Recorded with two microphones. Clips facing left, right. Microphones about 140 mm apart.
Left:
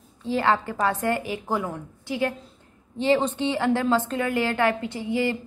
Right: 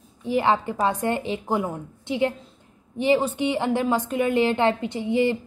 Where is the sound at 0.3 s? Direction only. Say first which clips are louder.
Right 1 dB; 20° right (ahead or behind).